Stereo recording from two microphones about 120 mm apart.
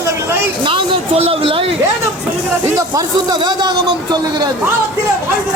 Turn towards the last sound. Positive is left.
turn(degrees=-35)  # may be behind; listen again after turning